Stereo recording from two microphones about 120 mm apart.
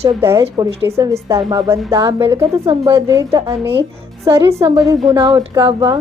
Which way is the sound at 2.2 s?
45° right (ahead or behind).